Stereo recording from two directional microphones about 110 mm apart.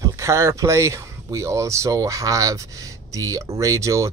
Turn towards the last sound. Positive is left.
turn(degrees=-30)  # may be behind; listen again after turning